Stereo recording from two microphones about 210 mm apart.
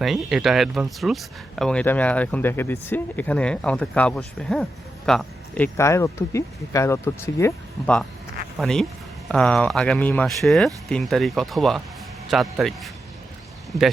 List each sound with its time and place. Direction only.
0.0 s speech: centre (ahead or behind)